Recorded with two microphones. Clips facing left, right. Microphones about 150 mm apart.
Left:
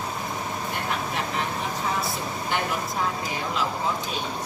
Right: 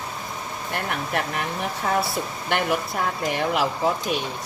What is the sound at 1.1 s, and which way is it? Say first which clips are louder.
Speech: right 4 dB; 65° right (ahead or behind).